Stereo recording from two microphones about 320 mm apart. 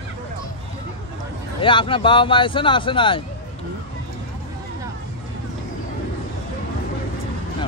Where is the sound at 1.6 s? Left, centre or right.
Centre.